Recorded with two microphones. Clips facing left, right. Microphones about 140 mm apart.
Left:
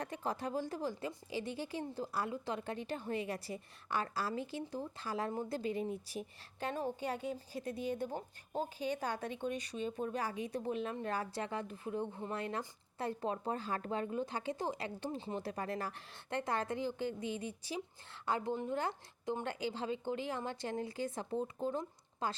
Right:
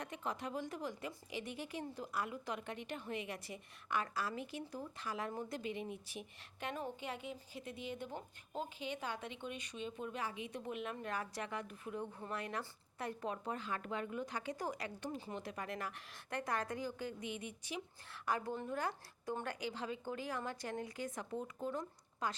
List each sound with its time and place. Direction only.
0.0 s a woman's voice: 35° left (ahead or behind)